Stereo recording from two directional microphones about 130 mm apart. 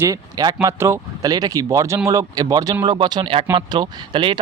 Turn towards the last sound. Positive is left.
turn(degrees=-35)  # may be behind; listen again after turning